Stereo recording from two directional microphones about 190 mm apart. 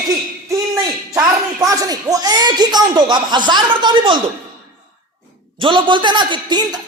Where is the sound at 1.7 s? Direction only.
20° right (ahead or behind).